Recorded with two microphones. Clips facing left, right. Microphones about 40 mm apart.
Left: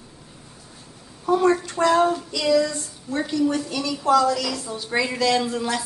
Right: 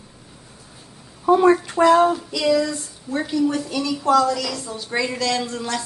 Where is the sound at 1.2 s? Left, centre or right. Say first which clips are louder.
Right 4 dB; centre.